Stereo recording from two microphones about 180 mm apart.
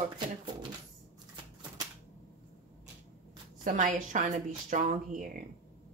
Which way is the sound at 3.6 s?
45° right (ahead or behind).